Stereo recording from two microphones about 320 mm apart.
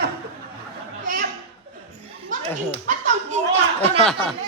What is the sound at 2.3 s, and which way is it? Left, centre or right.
Speech, centre.